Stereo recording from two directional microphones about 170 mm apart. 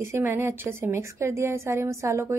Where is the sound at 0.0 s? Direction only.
15° right (ahead or behind).